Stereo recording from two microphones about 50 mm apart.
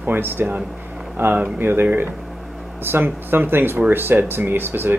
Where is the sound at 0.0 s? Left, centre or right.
Right.